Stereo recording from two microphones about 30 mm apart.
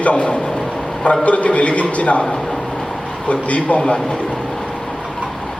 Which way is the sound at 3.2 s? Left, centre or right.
Left.